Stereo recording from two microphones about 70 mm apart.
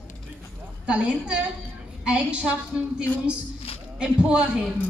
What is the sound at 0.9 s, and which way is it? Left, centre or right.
A woman's voice, centre.